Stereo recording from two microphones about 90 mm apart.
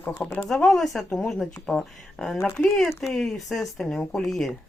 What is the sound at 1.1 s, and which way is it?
Speech, 15° left (ahead or behind).